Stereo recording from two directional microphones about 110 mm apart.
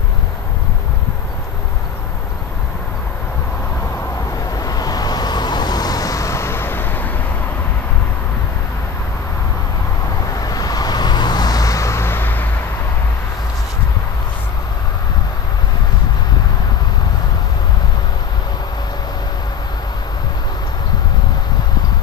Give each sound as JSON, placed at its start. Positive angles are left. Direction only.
{"t": 4.6, "sound": "vehicle", "side_deg": 35}
{"t": 10.3, "sound": "vehicle", "side_deg": 35}